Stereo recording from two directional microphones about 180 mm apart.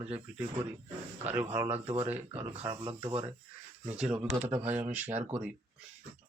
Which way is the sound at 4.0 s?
5° right (ahead or behind).